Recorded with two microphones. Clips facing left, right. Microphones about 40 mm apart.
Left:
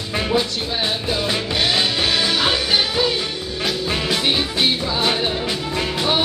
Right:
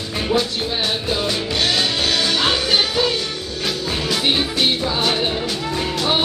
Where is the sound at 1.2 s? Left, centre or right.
Centre.